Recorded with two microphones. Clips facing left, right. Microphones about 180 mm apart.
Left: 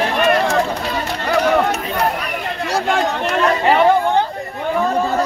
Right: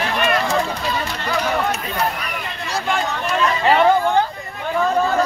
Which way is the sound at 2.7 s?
75° left (ahead or behind).